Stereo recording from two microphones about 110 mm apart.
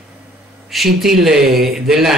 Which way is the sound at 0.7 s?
Centre (ahead or behind).